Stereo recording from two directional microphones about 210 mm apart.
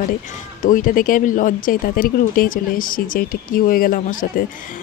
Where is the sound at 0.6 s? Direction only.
40° left (ahead or behind).